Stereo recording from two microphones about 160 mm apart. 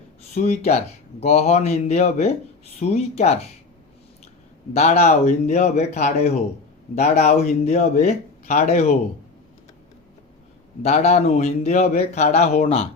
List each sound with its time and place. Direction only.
0.3 s speech: 45° left (ahead or behind)
4.7 s speech: 45° left (ahead or behind)
10.8 s speech: 45° left (ahead or behind)